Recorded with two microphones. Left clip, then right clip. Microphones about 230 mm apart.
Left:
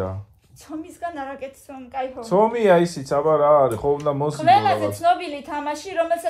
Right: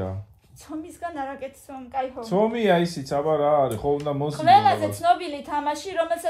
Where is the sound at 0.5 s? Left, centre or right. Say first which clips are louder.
Left 1 dB; right.